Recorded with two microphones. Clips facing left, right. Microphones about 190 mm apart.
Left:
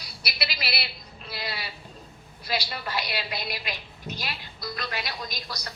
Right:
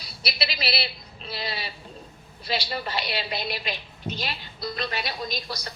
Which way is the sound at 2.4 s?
25° right (ahead or behind).